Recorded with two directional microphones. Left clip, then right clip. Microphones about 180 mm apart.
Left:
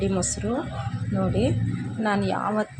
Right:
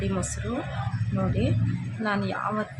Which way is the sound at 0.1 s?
15° left (ahead or behind).